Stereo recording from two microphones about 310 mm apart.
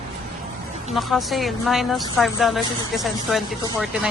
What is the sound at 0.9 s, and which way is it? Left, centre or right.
A woman's voice, centre.